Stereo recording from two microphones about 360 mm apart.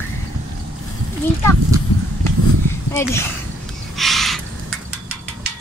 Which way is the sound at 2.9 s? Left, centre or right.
Centre.